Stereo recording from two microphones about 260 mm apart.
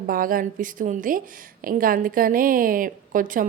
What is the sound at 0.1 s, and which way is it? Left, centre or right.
A woman's voice, right.